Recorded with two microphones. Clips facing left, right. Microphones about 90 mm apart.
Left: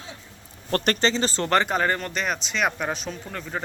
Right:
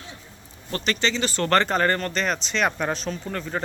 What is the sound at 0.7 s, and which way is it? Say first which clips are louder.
Speech: left 3 dB; 50° left (ahead or behind).